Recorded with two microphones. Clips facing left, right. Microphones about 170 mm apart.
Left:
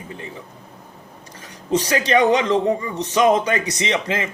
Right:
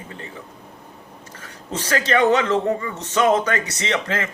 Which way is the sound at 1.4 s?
15° left (ahead or behind).